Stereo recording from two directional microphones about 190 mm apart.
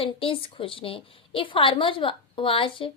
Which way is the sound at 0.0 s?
30° left (ahead or behind).